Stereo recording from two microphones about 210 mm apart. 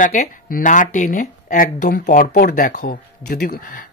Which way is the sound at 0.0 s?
45° left (ahead or behind).